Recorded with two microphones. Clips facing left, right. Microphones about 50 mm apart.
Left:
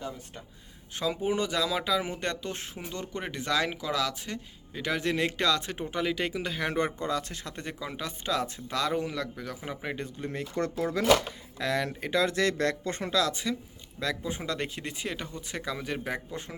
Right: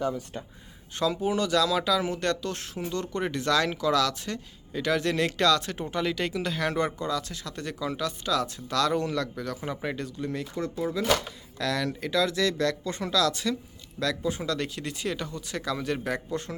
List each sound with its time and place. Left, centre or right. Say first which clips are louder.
0.9 s speech: right 2 dB; centre
6.7 s speech: right 1 dB; left; by 10.0 s centre
10.0 s speech: right 3 dB; left
10.5 s speech: left 3 dB; left
11.5 s speech: right 1 dB; left